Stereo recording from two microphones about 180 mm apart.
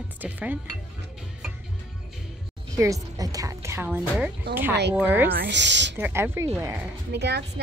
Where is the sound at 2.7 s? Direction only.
15° right (ahead or behind).